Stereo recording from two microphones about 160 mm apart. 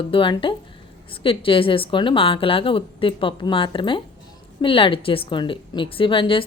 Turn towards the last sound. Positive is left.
turn(degrees=35)  # may be behind; listen again after turning